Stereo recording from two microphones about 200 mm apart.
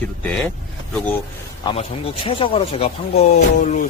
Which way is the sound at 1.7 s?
20° left (ahead or behind).